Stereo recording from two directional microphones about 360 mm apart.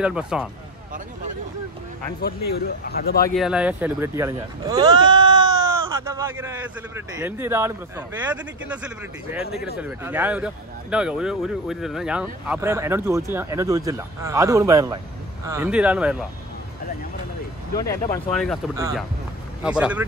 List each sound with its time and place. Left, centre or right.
0.0 s speech: centre
2.5 s a man's voice: left
3.3 s speech: centre
18.1 s speech: centre